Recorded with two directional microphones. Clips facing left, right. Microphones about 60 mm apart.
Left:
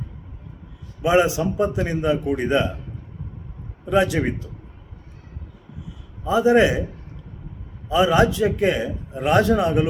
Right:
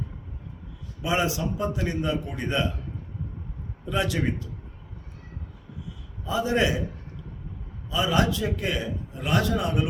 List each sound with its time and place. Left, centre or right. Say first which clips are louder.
1.0 s a man's voice: left 8 dB; left
3.8 s a man's voice: left 7 dB; left
6.2 s a man's voice: left 8 dB; left
7.9 s a man's voice: left 7 dB; left